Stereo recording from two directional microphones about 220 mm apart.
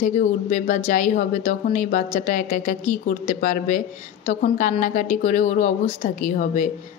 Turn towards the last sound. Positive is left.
turn(degrees=35)  # may be behind; listen again after turning